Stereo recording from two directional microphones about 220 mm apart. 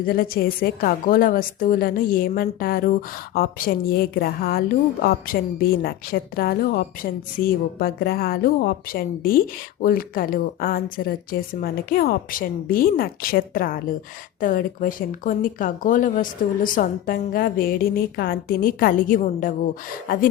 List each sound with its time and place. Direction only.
0.0 s a woman's voice: 40° left (ahead or behind)